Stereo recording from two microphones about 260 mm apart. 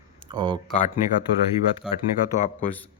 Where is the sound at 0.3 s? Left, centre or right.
Centre.